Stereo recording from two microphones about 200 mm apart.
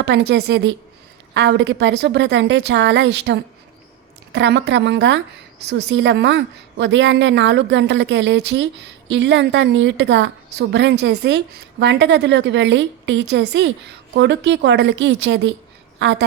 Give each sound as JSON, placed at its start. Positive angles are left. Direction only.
{"t": 0.0, "sound": "a woman's voice", "side_deg": -60}